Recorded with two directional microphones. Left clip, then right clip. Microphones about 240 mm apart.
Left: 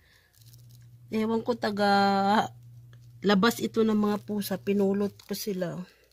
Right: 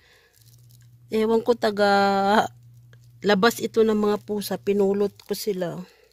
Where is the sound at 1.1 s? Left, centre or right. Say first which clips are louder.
Right 8 dB; right.